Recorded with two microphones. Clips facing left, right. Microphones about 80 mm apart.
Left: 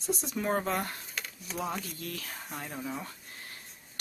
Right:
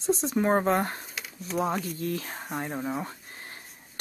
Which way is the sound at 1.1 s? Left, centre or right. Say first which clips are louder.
Right 8 dB; centre.